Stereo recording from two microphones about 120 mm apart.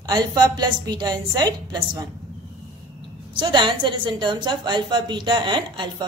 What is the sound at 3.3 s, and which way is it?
A woman's voice, 40° right (ahead or behind).